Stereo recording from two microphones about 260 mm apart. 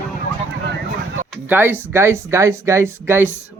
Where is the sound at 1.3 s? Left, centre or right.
Centre.